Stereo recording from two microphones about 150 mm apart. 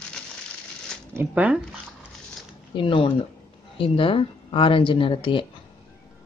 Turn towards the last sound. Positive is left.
turn(degrees=35)  # may be behind; listen again after turning